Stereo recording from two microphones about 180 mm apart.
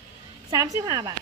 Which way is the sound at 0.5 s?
20° right (ahead or behind).